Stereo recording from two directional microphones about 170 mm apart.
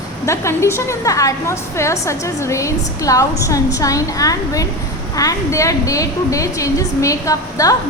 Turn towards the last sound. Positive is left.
turn(degrees=20)  # may be behind; listen again after turning